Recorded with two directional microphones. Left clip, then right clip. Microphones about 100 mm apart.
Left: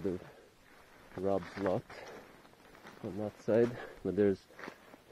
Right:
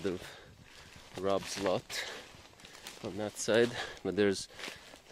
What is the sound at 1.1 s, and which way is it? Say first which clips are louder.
Speech: right 1 dB; 20° right (ahead or behind).